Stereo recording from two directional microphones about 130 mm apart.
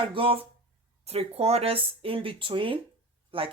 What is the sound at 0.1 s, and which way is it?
Speech, 45° right (ahead or behind).